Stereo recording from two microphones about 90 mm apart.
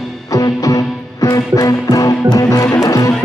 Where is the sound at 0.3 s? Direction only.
40° left (ahead or behind).